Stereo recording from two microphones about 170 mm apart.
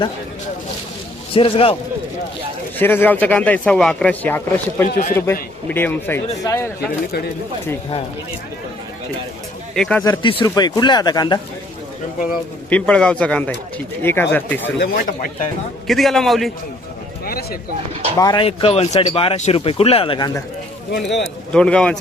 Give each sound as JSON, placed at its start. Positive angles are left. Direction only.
{"t": 1.3, "sound": "speech", "side_deg": 30}
{"t": 2.7, "sound": "speech", "side_deg": 10}
{"t": 4.9, "sound": "speech", "side_deg": 55}
{"t": 5.1, "sound": "speech", "side_deg": 15}
{"t": 9.7, "sound": "a man's voice", "side_deg": 5}
{"t": 10.2, "sound": "speech", "side_deg": 25}
{"t": 12.7, "sound": "speech", "side_deg": 5}
{"t": 14.8, "sound": "speech", "side_deg": 60}
{"t": 15.9, "sound": "a man's voice", "side_deg": 0}
{"t": 17.2, "sound": "speech", "side_deg": 60}
{"t": 18.2, "sound": "speech", "side_deg": 25}
{"t": 18.4, "sound": "speech", "side_deg": 35}
{"t": 20.9, "sound": "speech", "side_deg": 90}
{"t": 21.5, "sound": "a man's voice", "side_deg": 5}